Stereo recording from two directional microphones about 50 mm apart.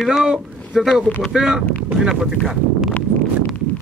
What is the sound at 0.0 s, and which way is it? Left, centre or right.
A man's voice, centre.